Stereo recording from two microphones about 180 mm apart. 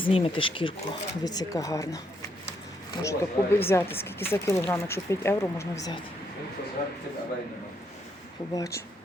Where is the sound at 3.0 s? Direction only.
15° left (ahead or behind).